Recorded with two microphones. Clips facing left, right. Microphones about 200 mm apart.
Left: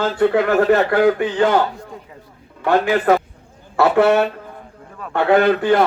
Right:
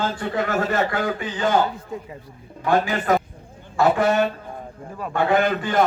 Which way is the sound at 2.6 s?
70° left (ahead or behind).